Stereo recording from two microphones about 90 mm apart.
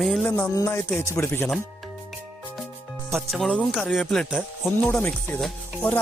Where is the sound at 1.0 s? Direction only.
30° left (ahead or behind).